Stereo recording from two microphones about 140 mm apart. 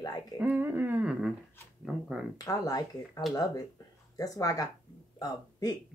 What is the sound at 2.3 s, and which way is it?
A woman's voice, 25° left (ahead or behind).